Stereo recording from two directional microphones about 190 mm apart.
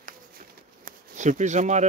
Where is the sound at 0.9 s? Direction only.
40° right (ahead or behind).